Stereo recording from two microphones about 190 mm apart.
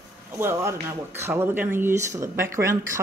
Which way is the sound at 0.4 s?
15° right (ahead or behind).